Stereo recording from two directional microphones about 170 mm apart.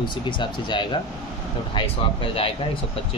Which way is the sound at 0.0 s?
30° left (ahead or behind).